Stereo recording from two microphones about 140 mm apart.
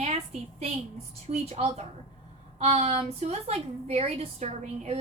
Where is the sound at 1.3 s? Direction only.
50° right (ahead or behind).